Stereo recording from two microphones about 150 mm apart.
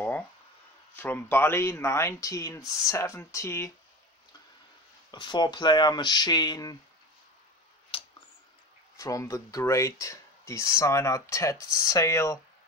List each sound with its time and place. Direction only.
0.9 s speech: 15° left (ahead or behind)
5.1 s speech: 30° left (ahead or behind)
7.9 s a sound: 35° left (ahead or behind)
8.9 s speech: 20° left (ahead or behind)